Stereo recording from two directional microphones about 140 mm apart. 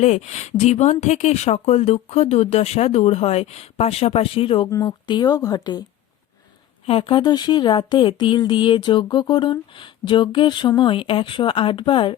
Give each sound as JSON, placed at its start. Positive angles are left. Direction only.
{"t": 0.0, "sound": "speech", "side_deg": 55}
{"t": 6.8, "sound": "speech", "side_deg": 40}